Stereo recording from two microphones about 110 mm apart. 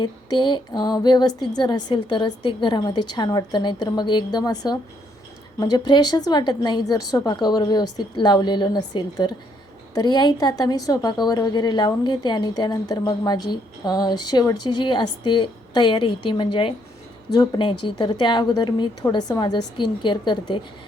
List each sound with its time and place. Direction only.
0.0 s a woman's voice: 40° left (ahead or behind)